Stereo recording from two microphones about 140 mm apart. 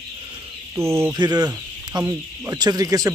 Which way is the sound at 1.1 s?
30° right (ahead or behind).